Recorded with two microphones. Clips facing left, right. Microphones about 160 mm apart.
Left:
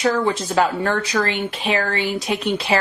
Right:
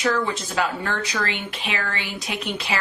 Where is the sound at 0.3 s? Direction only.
35° left (ahead or behind).